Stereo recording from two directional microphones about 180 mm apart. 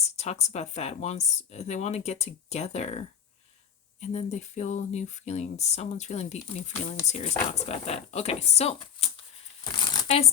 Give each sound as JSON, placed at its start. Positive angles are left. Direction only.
{"t": 0.0, "sound": "speech", "side_deg": 40}
{"t": 4.0, "sound": "speech", "side_deg": 35}